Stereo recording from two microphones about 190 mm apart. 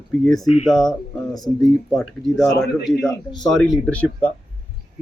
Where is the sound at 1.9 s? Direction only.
Centre (ahead or behind).